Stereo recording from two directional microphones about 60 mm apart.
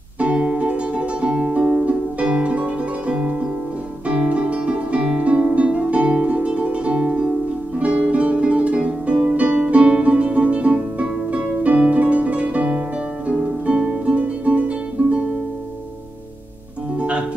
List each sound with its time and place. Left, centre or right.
0.2 s music: right
16.9 s music: centre